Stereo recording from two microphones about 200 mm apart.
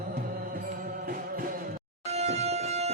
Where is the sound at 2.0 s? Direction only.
35° right (ahead or behind).